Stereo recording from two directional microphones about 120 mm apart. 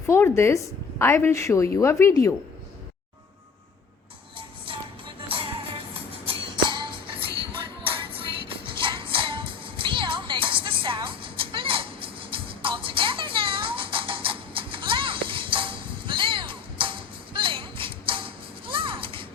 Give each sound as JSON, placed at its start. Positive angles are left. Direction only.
{"t": 0.1, "sound": "a woman's voice", "side_deg": 20}
{"t": 4.4, "sound": "music", "side_deg": -45}